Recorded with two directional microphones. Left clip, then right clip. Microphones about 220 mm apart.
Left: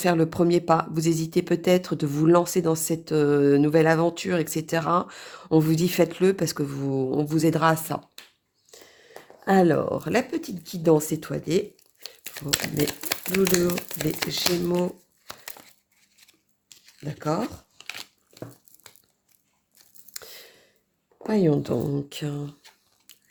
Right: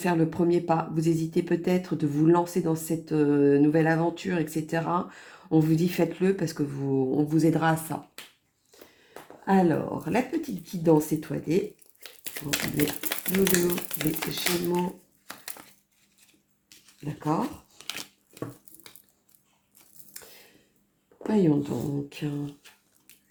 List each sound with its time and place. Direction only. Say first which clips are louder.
0.0 s speech: left 3 dB; 45° left (ahead or behind)
9.4 s speech: left 4 dB; 55° left (ahead or behind)
13.1 s speech: left 4 dB; 35° left (ahead or behind)
17.0 s speech: left 1 dB; 45° left (ahead or behind)
20.1 s a sound: left 7 dB; 45° left (ahead or behind)
21.2 s speech: left 2 dB; 55° left (ahead or behind)